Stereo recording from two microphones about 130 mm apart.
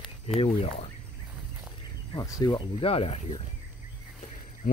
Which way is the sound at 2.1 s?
30° left (ahead or behind).